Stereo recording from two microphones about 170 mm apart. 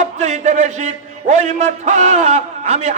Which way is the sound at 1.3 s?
45° right (ahead or behind).